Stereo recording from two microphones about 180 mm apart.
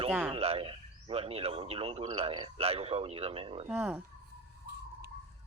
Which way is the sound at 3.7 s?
5° right (ahead or behind).